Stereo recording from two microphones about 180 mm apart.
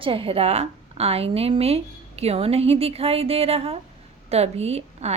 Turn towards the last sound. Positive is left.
turn(degrees=-35)  # may be behind; listen again after turning